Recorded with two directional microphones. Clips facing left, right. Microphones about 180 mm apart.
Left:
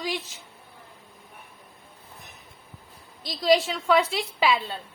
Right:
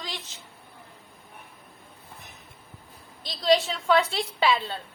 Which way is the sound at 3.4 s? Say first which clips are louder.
Left 1 dB; centre (ahead or behind).